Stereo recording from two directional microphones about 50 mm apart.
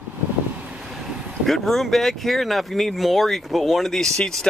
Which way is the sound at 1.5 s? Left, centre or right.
Centre.